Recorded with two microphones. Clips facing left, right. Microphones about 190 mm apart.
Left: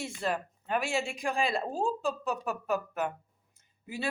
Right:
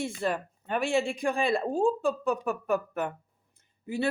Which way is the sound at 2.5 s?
55° right (ahead or behind).